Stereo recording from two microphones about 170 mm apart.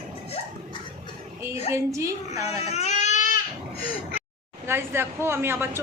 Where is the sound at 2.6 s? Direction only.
40° left (ahead or behind).